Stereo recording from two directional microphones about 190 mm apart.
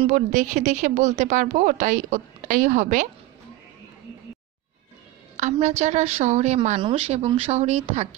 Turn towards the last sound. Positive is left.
turn(degrees=-35)  # may be behind; listen again after turning